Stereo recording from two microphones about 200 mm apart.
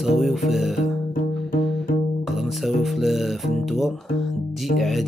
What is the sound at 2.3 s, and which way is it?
Speech, centre (ahead or behind).